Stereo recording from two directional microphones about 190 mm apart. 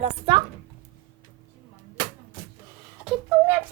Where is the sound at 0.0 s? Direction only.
30° right (ahead or behind).